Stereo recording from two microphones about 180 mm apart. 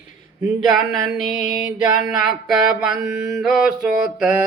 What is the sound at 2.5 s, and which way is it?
Mantra, 5° right (ahead or behind).